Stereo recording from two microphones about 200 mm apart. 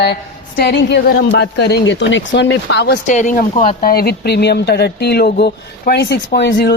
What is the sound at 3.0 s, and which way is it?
Speech, 40° left (ahead or behind).